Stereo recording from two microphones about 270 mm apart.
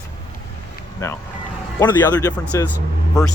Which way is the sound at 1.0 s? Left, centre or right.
Centre.